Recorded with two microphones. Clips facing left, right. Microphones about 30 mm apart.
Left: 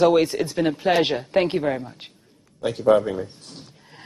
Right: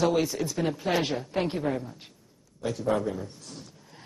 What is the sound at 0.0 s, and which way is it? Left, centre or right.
Speech, left.